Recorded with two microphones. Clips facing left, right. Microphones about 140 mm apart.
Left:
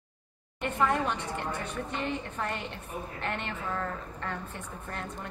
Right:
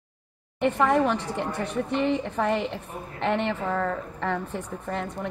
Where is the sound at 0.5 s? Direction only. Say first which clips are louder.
Right 7 dB; 75° right (ahead or behind).